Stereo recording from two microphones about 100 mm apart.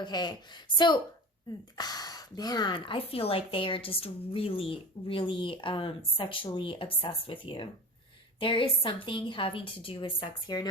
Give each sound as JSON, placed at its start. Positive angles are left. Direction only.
{"t": 0.0, "sound": "a woman's voice", "side_deg": 45}